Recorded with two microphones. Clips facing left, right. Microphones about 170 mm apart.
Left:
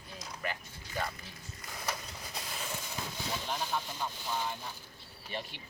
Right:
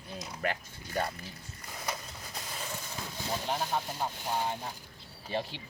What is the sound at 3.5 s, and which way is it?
Speech, 45° right (ahead or behind).